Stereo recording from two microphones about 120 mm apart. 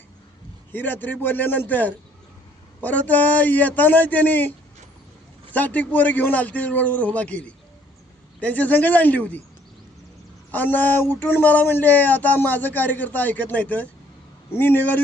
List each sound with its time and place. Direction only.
0.7 s speech: 15° left (ahead or behind)
10.5 s speech: 15° left (ahead or behind)